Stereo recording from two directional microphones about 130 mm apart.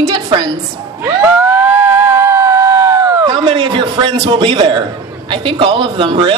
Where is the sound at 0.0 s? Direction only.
35° right (ahead or behind).